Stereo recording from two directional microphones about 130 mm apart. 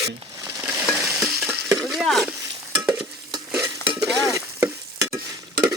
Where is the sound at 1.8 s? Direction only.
Centre (ahead or behind).